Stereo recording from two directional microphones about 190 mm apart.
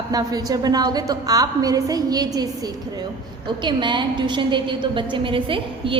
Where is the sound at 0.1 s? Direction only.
20° right (ahead or behind).